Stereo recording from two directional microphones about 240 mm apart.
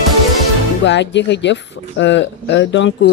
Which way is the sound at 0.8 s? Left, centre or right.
Left.